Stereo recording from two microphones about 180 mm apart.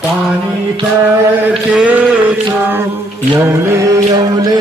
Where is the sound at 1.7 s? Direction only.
5° right (ahead or behind).